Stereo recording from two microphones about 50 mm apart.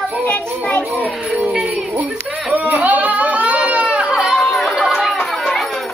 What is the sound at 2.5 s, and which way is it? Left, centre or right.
Baby cry, right.